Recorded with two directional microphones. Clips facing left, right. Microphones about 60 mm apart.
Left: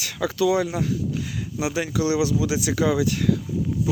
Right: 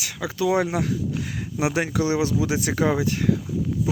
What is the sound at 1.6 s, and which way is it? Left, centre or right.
Speech, right.